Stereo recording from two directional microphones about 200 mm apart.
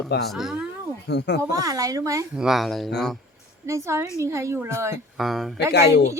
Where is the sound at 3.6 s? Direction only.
15° right (ahead or behind).